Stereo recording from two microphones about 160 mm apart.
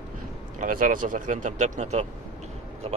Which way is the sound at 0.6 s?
60° right (ahead or behind).